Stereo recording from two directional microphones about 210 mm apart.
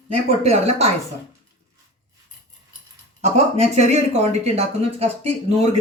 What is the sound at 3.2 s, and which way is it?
Speech, 30° right (ahead or behind).